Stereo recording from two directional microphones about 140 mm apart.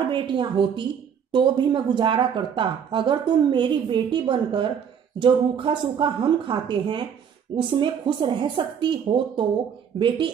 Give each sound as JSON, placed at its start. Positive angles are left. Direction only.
{"t": 0.1, "sound": "a woman's voice", "side_deg": -35}